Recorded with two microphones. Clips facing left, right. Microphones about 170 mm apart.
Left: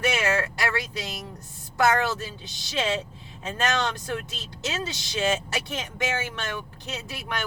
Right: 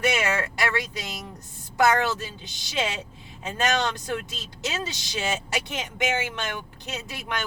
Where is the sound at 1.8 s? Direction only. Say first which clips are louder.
Right 1 dB; 15° right (ahead or behind).